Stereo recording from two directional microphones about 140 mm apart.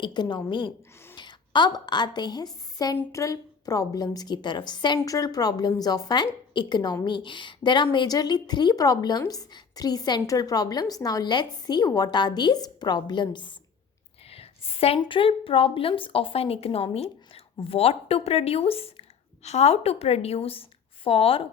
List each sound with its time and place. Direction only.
0.0 s a woman's voice: 30° left (ahead or behind)
14.3 s a woman's voice: 45° left (ahead or behind)